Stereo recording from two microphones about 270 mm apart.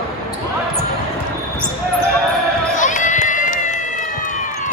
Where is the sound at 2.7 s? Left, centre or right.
Left.